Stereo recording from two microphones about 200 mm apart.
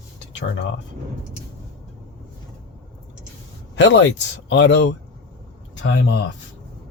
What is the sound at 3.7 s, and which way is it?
Speech, 65° left (ahead or behind).